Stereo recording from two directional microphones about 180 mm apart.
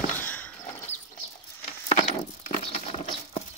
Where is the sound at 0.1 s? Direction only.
10° left (ahead or behind).